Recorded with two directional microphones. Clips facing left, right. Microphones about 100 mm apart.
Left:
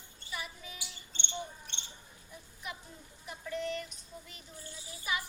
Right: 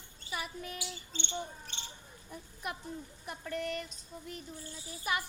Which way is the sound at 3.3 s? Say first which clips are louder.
Even; 55° right (ahead or behind).